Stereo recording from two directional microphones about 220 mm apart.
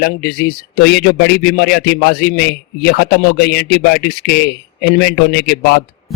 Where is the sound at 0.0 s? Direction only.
45° left (ahead or behind).